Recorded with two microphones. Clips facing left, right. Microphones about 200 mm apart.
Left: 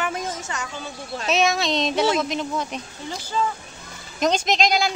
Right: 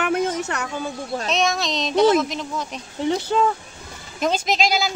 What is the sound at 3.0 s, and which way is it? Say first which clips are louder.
Speech: right 8 dB; 65° right (ahead or behind).